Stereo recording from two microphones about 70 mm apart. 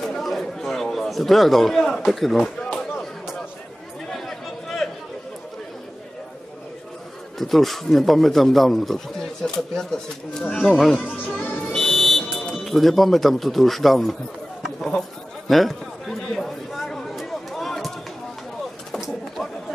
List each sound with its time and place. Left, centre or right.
0.0 s chatter: centre
2.4 s a sound: centre
4.1 s chatter: centre
7.3 s speech: centre
11.7 s a sound: centre
18.9 s bird: centre